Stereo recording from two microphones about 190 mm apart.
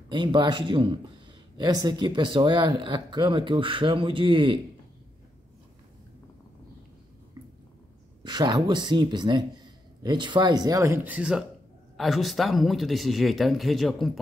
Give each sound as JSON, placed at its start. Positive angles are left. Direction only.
{"t": 0.1, "sound": "speech", "side_deg": -25}
{"t": 8.2, "sound": "speech", "side_deg": -25}